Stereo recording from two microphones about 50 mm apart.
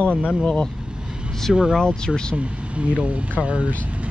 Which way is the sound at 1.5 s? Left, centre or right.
Centre.